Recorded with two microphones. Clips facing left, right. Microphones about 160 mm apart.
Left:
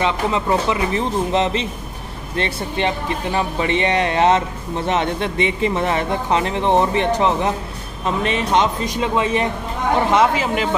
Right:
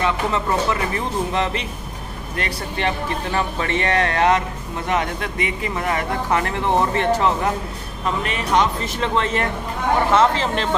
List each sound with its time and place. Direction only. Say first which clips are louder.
0.0 s speech: left 2 dB; 20° left (ahead or behind)